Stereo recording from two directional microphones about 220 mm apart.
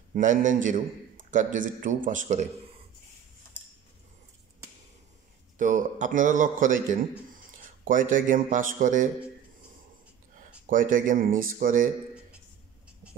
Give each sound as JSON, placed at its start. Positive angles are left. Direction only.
{"t": 0.1, "sound": "a man's voice", "side_deg": -35}
{"t": 5.6, "sound": "a man's voice", "side_deg": -35}
{"t": 10.7, "sound": "a man's voice", "side_deg": -40}